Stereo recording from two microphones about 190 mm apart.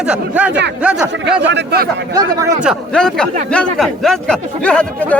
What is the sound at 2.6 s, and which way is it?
Speech, centre (ahead or behind).